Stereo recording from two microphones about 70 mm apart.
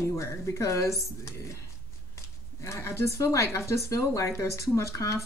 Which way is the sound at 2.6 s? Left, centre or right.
Left.